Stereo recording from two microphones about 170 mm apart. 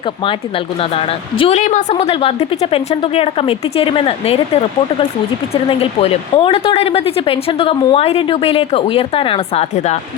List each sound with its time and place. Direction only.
0.8 s a woman's voice: 35° left (ahead or behind)